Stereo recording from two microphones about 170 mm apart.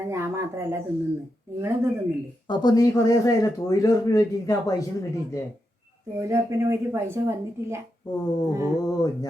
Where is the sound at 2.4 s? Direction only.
25° left (ahead or behind).